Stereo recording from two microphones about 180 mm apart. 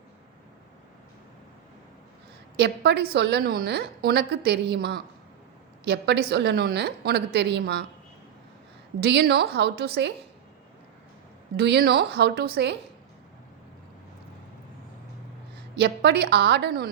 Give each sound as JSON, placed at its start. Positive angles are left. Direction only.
{"t": 2.6, "sound": "a woman's voice", "side_deg": -65}
{"t": 9.0, "sound": "a woman's voice", "side_deg": -65}
{"t": 11.5, "sound": "a woman's voice", "side_deg": -65}
{"t": 15.7, "sound": "a woman's voice", "side_deg": -70}